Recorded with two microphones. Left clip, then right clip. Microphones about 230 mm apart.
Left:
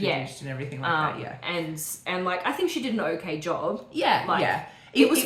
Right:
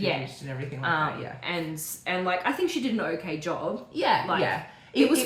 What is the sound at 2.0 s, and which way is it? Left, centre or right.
A woman's voice, centre.